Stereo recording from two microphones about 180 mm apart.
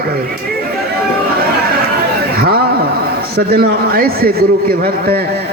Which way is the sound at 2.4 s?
55° right (ahead or behind).